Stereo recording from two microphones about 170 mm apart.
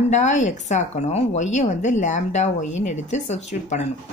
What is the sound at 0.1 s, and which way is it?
Speech, 45° left (ahead or behind).